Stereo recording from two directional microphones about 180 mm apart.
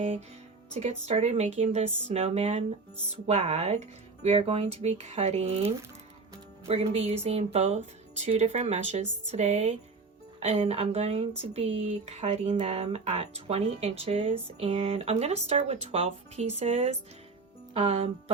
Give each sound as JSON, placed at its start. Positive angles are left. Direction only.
{"t": 0.7, "sound": "speech", "side_deg": -35}
{"t": 6.7, "sound": "speech", "side_deg": -35}